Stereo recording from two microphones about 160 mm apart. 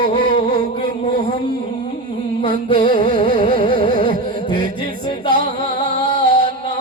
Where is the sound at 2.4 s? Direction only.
30° left (ahead or behind).